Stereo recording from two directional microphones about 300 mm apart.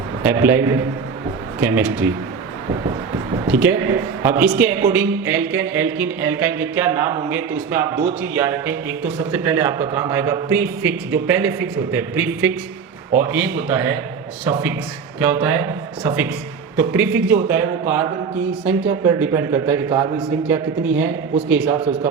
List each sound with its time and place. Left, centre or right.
0.2 s a man's voice: centre
3.3 s a man's voice: centre
15.2 s a man's voice: centre
18.6 s a man's voice: centre